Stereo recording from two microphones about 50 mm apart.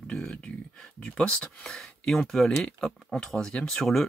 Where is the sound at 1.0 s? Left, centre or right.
Left.